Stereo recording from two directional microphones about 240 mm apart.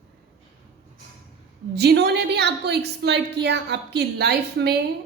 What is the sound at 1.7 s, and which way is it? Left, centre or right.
A woman's voice, right.